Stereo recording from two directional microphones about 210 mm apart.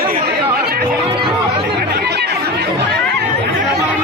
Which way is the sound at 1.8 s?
50° right (ahead or behind).